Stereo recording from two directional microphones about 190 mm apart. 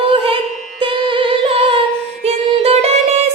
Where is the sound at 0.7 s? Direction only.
25° right (ahead or behind).